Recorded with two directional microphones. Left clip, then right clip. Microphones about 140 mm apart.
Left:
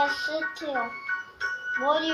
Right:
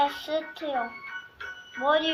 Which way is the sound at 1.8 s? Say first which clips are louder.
Right 2 dB; 5° right (ahead or behind).